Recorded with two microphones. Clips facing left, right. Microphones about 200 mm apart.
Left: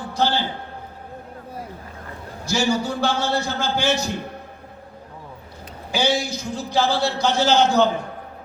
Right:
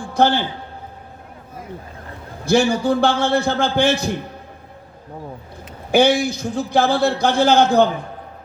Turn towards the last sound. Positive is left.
turn(degrees=-55)  # may be behind; listen again after turning